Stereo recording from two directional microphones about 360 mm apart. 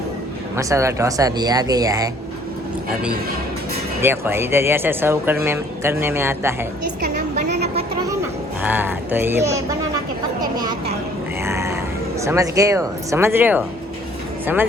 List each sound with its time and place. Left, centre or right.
0.5 s speech: centre
4.0 s speech: centre
7.0 s a sound: right
8.6 s speech: centre
11.4 s a sound: centre
12.2 s speech: centre